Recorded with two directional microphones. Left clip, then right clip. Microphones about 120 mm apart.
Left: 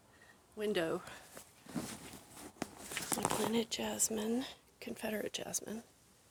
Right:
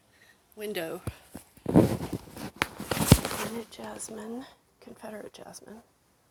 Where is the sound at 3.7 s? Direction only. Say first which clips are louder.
Left 3 dB; 30° left (ahead or behind); by 5.7 s 50° left (ahead or behind).